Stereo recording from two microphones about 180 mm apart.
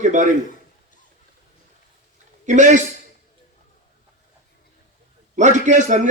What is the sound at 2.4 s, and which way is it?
Speech, 45° right (ahead or behind).